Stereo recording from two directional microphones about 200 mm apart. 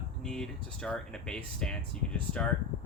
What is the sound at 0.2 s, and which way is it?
Speech, 5° left (ahead or behind).